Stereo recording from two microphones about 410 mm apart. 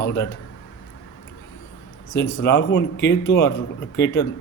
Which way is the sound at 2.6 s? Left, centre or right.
Left.